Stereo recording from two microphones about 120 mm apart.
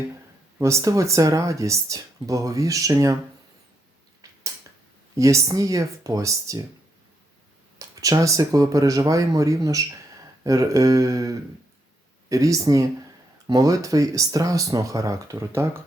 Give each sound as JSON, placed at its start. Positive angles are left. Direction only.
{"t": 0.6, "sound": "speech", "side_deg": -25}
{"t": 4.2, "sound": "a sound", "side_deg": -25}
{"t": 5.1, "sound": "speech", "side_deg": -25}
{"t": 7.8, "sound": "speech", "side_deg": -30}